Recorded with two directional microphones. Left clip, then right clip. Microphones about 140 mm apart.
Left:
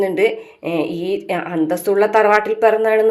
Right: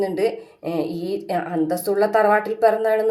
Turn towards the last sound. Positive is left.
turn(degrees=15)  # may be behind; listen again after turning